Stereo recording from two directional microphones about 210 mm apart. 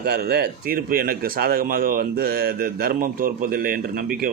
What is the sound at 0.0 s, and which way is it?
A man's voice, 50° right (ahead or behind).